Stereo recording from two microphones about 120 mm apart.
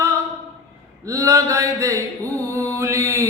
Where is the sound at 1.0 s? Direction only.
25° right (ahead or behind).